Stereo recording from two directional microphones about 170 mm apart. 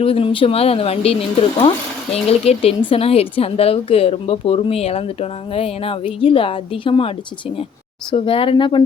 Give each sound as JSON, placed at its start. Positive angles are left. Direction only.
{"t": 0.0, "sound": "a woman's voice", "side_deg": 35}
{"t": 8.1, "sound": "a woman's voice", "side_deg": 35}